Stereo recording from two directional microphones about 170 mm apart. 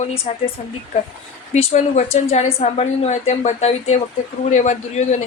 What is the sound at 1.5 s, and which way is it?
A woman's voice, 40° left (ahead or behind).